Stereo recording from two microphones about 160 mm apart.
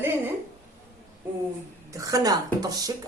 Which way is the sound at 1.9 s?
20° right (ahead or behind).